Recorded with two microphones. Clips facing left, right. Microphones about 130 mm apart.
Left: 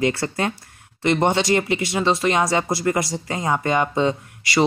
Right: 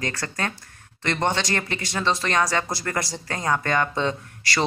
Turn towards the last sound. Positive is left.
turn(degrees=10)  # may be behind; listen again after turning